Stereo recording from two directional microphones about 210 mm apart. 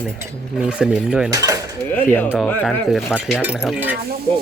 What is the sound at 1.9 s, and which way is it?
Speech, 10° left (ahead or behind).